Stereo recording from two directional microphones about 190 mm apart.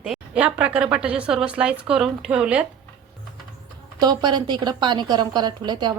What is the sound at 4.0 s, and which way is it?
A woman's voice, 20° right (ahead or behind).